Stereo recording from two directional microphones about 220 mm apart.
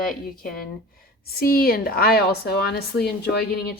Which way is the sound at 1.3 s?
45° left (ahead or behind).